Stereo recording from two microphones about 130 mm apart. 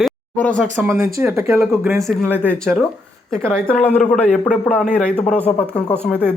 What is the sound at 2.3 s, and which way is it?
Speech, 10° left (ahead or behind).